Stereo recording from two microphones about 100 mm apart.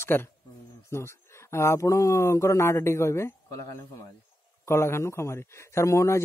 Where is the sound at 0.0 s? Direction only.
20° left (ahead or behind).